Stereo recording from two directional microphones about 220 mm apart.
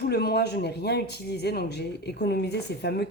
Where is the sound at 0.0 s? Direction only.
45° left (ahead or behind).